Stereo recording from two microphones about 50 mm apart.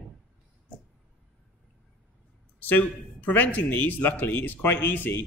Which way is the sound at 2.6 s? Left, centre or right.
Left.